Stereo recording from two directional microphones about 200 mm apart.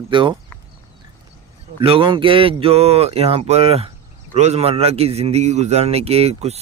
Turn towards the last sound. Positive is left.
turn(degrees=-30)  # may be behind; listen again after turning